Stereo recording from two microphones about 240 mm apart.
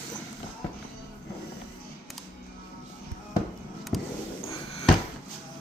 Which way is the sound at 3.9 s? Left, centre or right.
Centre.